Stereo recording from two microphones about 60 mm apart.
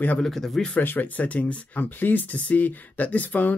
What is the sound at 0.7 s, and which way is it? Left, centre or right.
Speech, left.